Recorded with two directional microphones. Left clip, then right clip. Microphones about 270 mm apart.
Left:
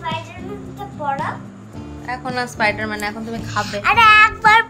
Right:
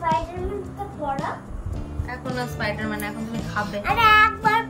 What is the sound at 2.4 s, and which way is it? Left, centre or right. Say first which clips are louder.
Speech: left 9 dB; centre.